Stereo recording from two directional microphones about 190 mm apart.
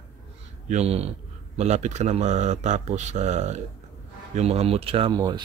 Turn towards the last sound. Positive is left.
turn(degrees=-25)  # may be behind; listen again after turning